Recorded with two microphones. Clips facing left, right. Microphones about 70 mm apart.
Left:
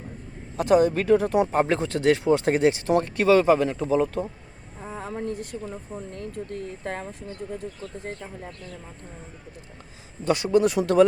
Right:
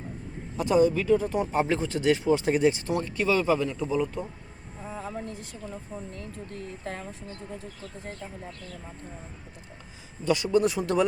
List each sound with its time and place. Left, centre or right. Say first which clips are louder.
0.5 s speech: left 3 dB; left
4.9 s speech: left 6 dB; left
10.2 s speech: left 3 dB; left
10.6 s speech: left 5 dB; left